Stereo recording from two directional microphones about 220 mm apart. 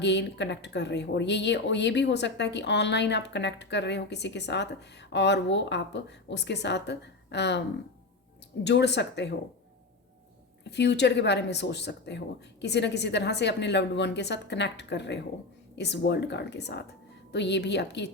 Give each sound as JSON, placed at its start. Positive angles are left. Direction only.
{"t": 0.0, "sound": "speech", "side_deg": 50}
{"t": 8.6, "sound": "speech", "side_deg": 50}
{"t": 10.6, "sound": "speech", "side_deg": 50}